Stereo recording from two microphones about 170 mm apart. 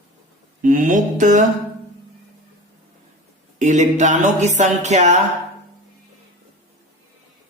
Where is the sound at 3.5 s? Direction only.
45° right (ahead or behind).